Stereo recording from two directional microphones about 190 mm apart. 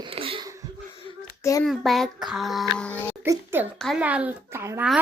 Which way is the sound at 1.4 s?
15° left (ahead or behind).